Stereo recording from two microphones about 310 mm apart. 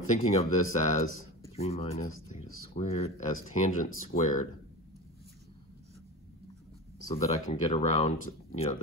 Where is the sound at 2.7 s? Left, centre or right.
Left.